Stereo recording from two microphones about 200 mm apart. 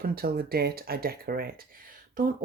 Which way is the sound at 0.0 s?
50° right (ahead or behind).